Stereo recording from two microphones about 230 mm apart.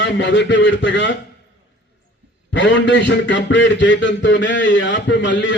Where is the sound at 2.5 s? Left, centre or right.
Left.